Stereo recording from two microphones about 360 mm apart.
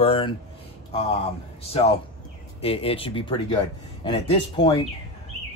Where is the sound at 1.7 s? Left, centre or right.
Centre.